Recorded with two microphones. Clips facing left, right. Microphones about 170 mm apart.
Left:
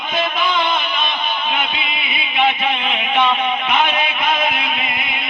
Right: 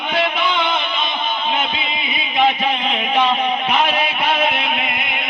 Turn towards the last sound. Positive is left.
turn(degrees=-30)  # may be behind; listen again after turning